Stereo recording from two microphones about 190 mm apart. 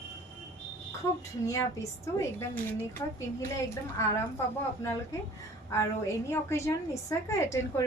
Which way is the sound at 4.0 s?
15° left (ahead or behind).